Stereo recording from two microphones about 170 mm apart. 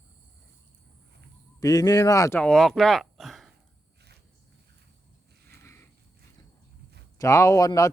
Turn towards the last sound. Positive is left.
turn(degrees=20)  # may be behind; listen again after turning